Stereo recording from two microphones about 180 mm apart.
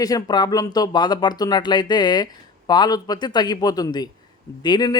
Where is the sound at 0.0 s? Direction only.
20° left (ahead or behind).